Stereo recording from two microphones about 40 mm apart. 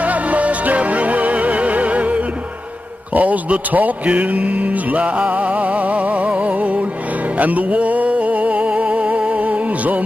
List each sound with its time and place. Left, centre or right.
0.0 s music: right
3.2 s mantra: right
4.0 s mantra: right
7.3 s music: right